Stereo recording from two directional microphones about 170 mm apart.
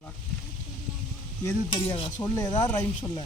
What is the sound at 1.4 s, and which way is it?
Speech, 20° left (ahead or behind).